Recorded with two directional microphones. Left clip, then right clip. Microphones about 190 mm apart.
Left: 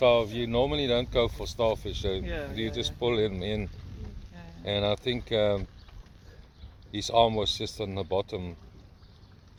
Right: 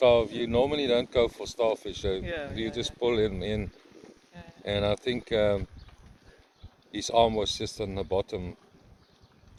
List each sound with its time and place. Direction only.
0.0 s speech: 15° right (ahead or behind)
2.2 s speech: 30° right (ahead or behind)
2.6 s speech: 10° right (ahead or behind)
6.9 s speech: 5° right (ahead or behind)